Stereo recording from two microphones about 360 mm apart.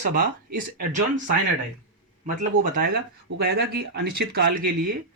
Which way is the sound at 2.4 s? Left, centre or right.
Right.